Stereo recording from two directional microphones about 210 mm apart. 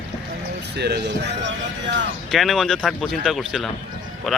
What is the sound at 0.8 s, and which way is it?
Speech, 50° right (ahead or behind).